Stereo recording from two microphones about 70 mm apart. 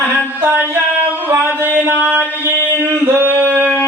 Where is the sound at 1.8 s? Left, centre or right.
Right.